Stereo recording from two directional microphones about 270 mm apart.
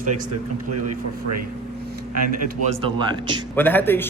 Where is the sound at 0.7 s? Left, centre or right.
Right.